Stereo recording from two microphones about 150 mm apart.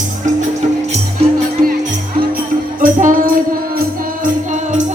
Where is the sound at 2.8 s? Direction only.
65° right (ahead or behind).